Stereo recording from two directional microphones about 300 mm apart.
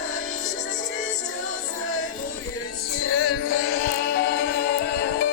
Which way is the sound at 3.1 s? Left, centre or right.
Left.